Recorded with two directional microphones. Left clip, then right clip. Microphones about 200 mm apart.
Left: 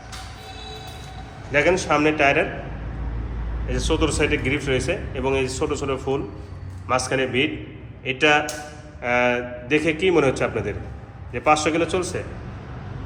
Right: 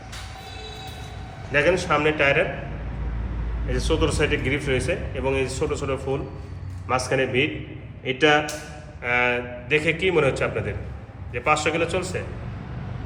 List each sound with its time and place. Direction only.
1.5 s a man's voice: 5° left (ahead or behind)
3.7 s a man's voice: centre (ahead or behind)
9.0 s a man's voice: 10° left (ahead or behind)